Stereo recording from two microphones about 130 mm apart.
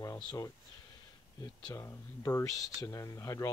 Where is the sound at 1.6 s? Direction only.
25° left (ahead or behind).